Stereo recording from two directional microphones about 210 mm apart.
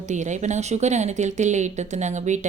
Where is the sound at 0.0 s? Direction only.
35° right (ahead or behind).